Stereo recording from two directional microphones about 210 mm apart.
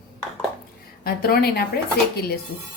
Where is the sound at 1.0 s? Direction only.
45° left (ahead or behind).